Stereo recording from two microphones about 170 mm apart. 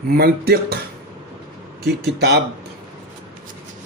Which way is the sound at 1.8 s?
75° right (ahead or behind).